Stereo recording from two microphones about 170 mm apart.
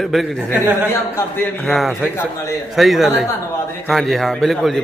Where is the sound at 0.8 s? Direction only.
15° left (ahead or behind).